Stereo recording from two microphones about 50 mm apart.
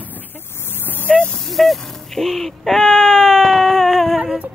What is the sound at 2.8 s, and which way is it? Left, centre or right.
Baby cry, centre.